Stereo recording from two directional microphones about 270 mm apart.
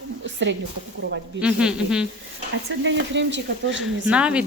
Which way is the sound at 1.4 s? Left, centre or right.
Centre.